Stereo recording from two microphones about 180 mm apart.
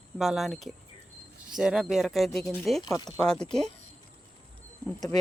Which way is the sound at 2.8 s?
20° left (ahead or behind).